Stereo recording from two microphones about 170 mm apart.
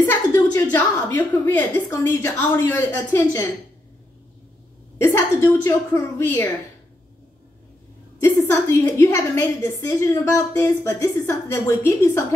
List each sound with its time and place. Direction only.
0.0 s a woman's voice: 10° left (ahead or behind)
4.9 s a woman's voice: 15° left (ahead or behind)
8.2 s a woman's voice: 15° left (ahead or behind)